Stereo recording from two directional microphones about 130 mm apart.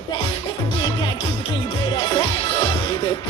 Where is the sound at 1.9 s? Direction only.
40° left (ahead or behind).